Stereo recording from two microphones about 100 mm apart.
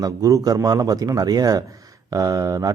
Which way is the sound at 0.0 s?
35° right (ahead or behind).